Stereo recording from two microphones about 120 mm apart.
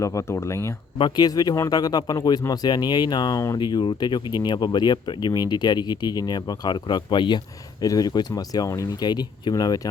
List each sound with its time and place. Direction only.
0.0 s speech: 25° left (ahead or behind)
0.9 s speech: 40° left (ahead or behind)